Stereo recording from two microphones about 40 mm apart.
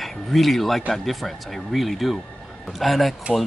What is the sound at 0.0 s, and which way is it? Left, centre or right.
Speech, centre.